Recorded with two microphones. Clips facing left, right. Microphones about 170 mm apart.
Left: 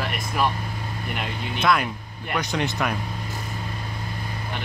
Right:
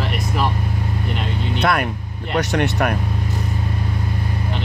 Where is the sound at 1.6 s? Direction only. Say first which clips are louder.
Right 2 dB; 60° right (ahead or behind).